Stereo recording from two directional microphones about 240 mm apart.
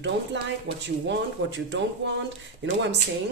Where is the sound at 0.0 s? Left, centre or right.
Right.